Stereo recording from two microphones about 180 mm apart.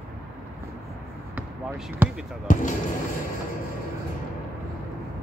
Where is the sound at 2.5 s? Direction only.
45° left (ahead or behind).